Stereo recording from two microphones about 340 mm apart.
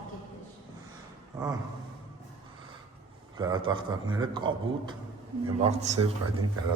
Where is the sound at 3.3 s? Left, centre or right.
Centre.